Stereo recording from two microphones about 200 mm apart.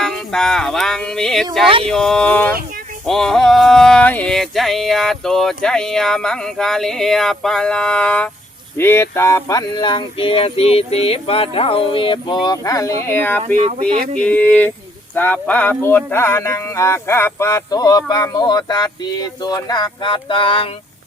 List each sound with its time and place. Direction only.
0.0 s a sound: centre (ahead or behind)
8.8 s speech: 10° left (ahead or behind)
13.6 s speech: 30° right (ahead or behind)
14.2 s speech: 5° left (ahead or behind); by 20.7 s 25° left (ahead or behind)